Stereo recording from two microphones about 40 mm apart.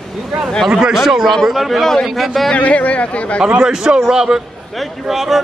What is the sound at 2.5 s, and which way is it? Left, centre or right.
Speech, left.